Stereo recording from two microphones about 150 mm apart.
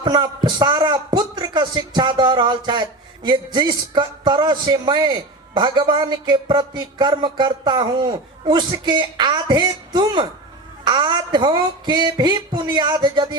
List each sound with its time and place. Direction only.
0.0 s a man's voice: 30° right (ahead or behind)